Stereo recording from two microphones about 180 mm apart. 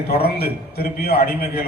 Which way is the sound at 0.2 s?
60° left (ahead or behind).